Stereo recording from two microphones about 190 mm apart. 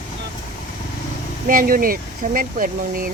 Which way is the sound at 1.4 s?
50° right (ahead or behind).